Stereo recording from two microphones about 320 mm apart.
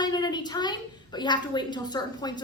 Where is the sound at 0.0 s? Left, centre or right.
Centre.